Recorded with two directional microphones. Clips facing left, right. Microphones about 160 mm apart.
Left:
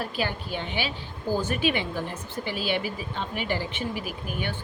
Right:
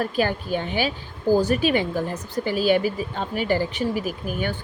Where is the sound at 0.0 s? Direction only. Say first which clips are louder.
Right 7 dB; 45° right (ahead or behind).